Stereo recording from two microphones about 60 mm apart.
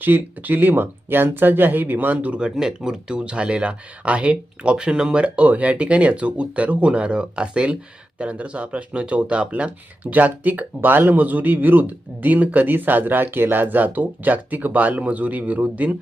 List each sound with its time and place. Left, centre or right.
0.0 s speech: right